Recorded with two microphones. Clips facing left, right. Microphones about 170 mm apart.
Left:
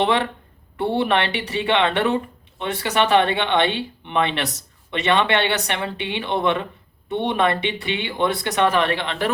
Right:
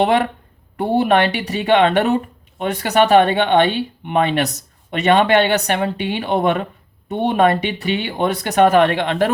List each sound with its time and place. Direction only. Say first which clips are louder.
0.0 s speech: right 4 dB; 45° right (ahead or behind)